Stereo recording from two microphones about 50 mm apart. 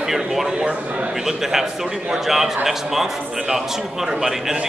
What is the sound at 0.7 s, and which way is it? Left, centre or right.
Speech, right.